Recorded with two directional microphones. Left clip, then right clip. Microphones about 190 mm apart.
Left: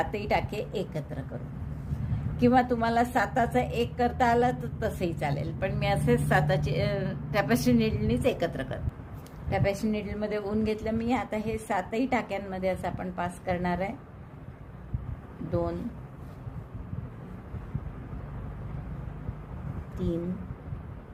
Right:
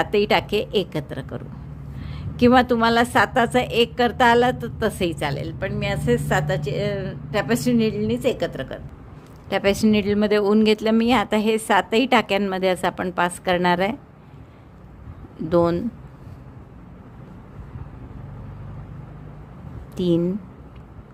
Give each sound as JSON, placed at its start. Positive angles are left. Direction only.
{"t": 0.0, "sound": "a woman's voice", "side_deg": -40}
{"t": 9.5, "sound": "speech", "side_deg": -40}
{"t": 15.4, "sound": "speech", "side_deg": -50}